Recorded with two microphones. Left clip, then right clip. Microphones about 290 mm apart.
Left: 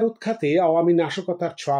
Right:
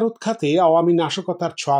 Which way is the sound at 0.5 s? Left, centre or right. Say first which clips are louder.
Right 3 dB; centre.